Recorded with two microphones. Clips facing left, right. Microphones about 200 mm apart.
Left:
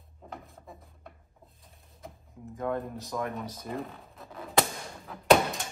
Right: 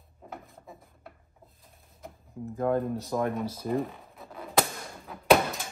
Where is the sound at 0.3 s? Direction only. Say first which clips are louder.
Right 1 dB; centre (ahead or behind).